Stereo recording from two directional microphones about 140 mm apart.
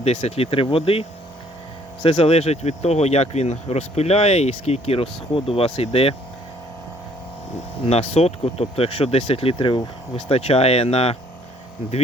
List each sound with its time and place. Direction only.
0.0 s speech: 50° left (ahead or behind)
2.0 s speech: 45° left (ahead or behind)
7.5 s speech: 50° left (ahead or behind)